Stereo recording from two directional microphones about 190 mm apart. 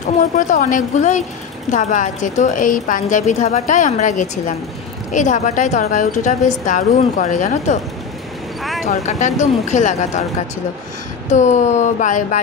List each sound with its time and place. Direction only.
0.4 s a woman's voice: 40° left (ahead or behind)
8.8 s a woman's voice: 40° left (ahead or behind)
11.2 s a woman's voice: 40° left (ahead or behind)